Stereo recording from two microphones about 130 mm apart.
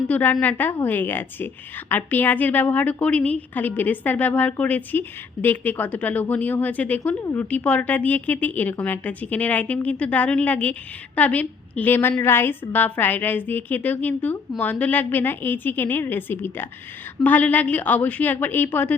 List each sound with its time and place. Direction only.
0.1 s a woman's voice: 10° left (ahead or behind)